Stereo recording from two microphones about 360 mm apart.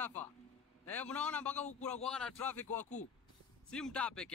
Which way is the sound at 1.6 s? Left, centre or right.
Centre.